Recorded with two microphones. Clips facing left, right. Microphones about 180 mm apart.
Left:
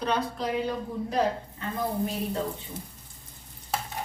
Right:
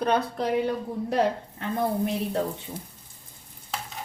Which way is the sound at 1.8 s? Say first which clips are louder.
Right 3 dB; 60° right (ahead or behind).